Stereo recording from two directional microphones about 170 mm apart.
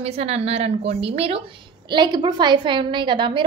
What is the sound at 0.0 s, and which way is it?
A woman's voice, 35° right (ahead or behind).